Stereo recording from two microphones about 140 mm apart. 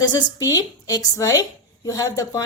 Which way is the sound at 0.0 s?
30° left (ahead or behind).